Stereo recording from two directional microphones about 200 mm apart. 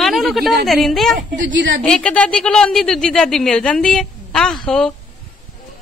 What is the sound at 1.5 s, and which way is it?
Speech, 65° right (ahead or behind).